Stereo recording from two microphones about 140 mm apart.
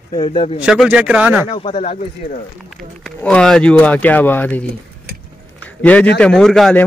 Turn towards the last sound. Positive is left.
turn(degrees=5)  # may be behind; listen again after turning